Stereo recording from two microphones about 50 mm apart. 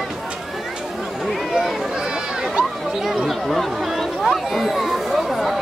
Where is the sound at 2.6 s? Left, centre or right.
Centre.